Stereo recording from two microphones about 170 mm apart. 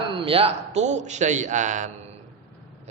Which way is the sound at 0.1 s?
30° right (ahead or behind).